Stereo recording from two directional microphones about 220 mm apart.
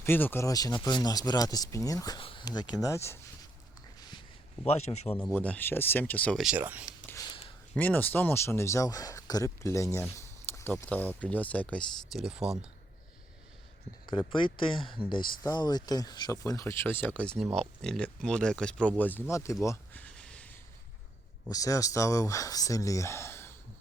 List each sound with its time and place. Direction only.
0.0 s speech: 10° left (ahead or behind)
4.6 s speech: 30° left (ahead or behind)
5.1 s speech: 10° left (ahead or behind); by 6.8 s 5° right (ahead or behind)
6.8 s a sound: 15° left (ahead or behind)
7.8 s speech: 10° left (ahead or behind)
14.1 s speech: 20° left (ahead or behind)
19.6 s a sound: 10° left (ahead or behind)
21.4 s speech: 15° left (ahead or behind)